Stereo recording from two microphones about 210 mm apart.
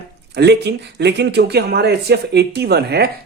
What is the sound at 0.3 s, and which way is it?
Speech, 55° right (ahead or behind).